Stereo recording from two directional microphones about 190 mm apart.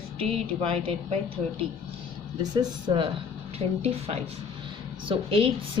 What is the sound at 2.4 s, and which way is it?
A woman's voice, 20° right (ahead or behind).